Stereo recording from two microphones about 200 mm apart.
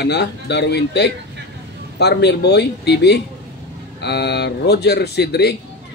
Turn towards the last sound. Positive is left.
turn(degrees=55)  # may be behind; listen again after turning